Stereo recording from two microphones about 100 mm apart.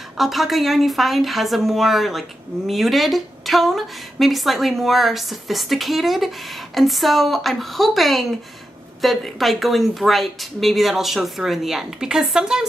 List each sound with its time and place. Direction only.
0.2 s speech: centre (ahead or behind)